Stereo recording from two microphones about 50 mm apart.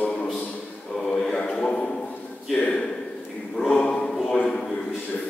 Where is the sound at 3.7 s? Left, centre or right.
Centre.